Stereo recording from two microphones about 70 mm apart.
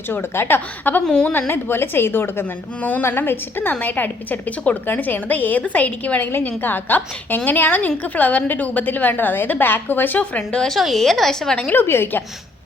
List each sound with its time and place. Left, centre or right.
0.1 s a woman's voice: left
10.7 s a woman's voice: centre
11.7 s a woman's voice: left